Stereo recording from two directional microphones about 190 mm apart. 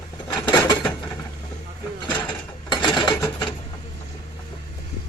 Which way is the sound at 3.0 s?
20° left (ahead or behind).